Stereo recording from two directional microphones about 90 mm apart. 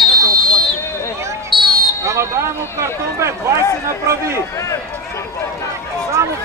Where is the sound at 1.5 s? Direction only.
Centre (ahead or behind).